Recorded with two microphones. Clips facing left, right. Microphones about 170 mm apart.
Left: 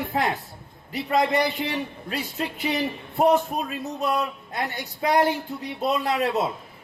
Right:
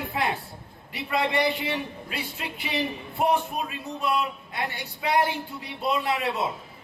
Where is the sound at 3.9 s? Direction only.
40° left (ahead or behind).